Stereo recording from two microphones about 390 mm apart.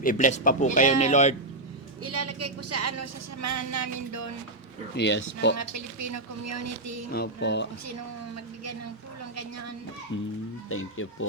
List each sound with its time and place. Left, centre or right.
0.0 s a man's voice: centre
2.0 s speech: right
4.9 s speech: left
5.5 s speech: right
7.1 s speech: left
9.3 s speech: right
10.7 s speech: left